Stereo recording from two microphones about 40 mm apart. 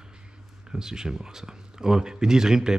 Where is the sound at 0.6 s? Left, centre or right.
Centre.